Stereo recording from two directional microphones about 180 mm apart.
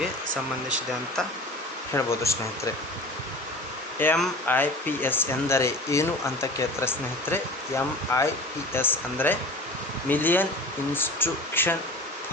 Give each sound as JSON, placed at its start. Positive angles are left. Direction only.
{"t": 2.0, "sound": "speech", "side_deg": 15}
{"t": 3.9, "sound": "speech", "side_deg": 10}